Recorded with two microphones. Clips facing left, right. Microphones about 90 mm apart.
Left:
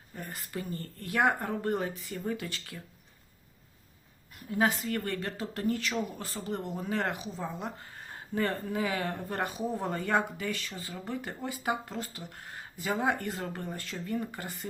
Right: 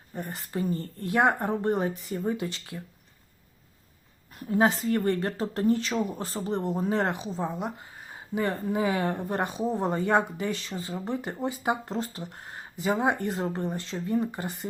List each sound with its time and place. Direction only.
0.1 s speech: 25° right (ahead or behind)
4.4 s speech: 30° right (ahead or behind)